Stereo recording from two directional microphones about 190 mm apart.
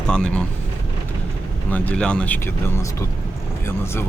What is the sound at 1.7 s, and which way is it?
Speech, 10° left (ahead or behind).